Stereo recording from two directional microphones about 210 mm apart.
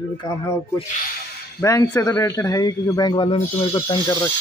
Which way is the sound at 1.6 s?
15° left (ahead or behind).